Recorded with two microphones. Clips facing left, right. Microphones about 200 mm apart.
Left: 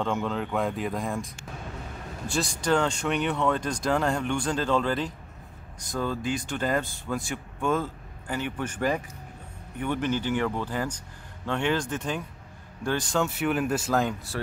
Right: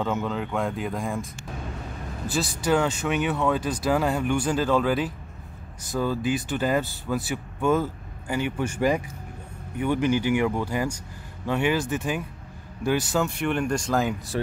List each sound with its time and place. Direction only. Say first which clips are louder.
0.0 s speech: right 1 dB; centre (ahead or behind)
14.3 s speech: right 6 dB; 20° right (ahead or behind)